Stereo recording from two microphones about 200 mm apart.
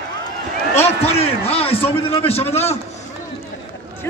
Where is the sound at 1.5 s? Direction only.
30° left (ahead or behind).